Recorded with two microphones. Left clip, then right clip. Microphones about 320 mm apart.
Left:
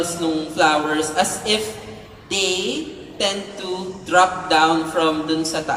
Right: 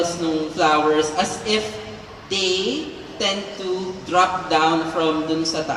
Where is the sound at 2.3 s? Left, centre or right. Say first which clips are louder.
Left 1 dB; left.